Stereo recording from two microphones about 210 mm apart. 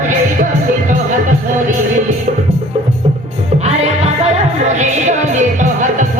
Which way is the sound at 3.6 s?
30° right (ahead or behind).